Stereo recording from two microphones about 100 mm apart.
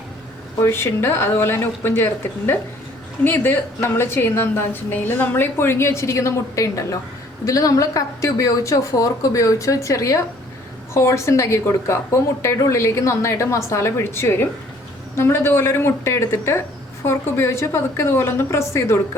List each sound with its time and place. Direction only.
0.6 s a woman's voice: 25° left (ahead or behind)